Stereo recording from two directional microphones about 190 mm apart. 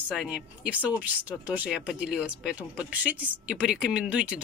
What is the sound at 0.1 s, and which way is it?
Speech, 5° right (ahead or behind).